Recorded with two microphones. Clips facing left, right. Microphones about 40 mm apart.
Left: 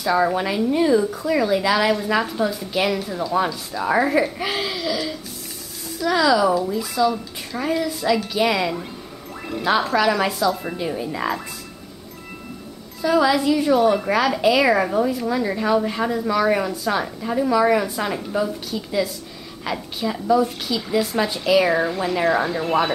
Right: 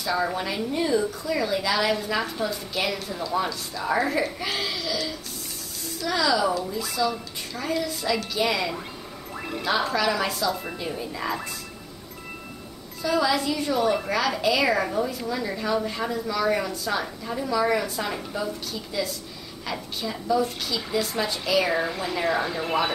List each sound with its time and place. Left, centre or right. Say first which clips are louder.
0.0 s a woman's voice: left 6 dB; centre
9.9 s a woman's voice: left 5 dB; centre
11.1 s wind chime: left 4 dB; centre
13.0 s a woman's voice: left 6 dB; centre